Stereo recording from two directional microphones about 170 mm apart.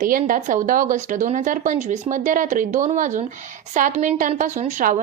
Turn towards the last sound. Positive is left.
turn(degrees=-50)  # may be behind; listen again after turning